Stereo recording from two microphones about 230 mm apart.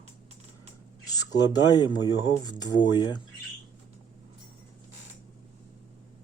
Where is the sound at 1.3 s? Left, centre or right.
Centre.